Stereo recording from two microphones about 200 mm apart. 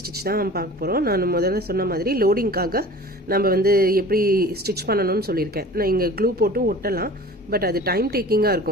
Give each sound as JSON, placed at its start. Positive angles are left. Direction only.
{"t": 0.0, "sound": "speech", "side_deg": -50}